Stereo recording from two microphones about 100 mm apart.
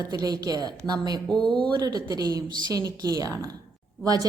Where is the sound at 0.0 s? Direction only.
40° right (ahead or behind).